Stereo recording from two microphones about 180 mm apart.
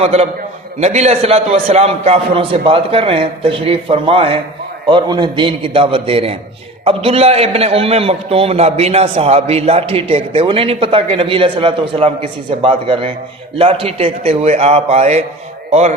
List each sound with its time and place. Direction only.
0.0 s a man's voice: 35° right (ahead or behind)